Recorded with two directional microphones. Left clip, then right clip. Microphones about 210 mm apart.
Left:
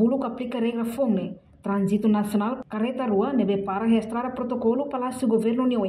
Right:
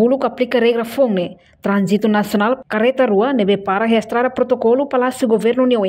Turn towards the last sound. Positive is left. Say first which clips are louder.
# right 9 dB
turn(degrees=-50)  # may be behind; listen again after turning